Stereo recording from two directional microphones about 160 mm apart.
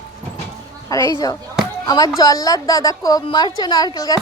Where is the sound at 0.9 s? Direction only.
20° left (ahead or behind).